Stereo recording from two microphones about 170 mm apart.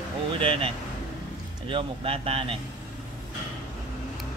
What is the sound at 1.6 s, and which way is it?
Speech, 30° right (ahead or behind).